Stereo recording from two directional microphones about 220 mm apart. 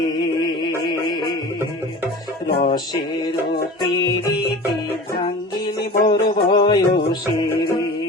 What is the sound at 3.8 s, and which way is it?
Music, 20° left (ahead or behind).